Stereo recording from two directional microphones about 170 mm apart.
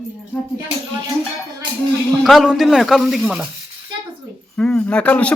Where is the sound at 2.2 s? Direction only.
Centre (ahead or behind).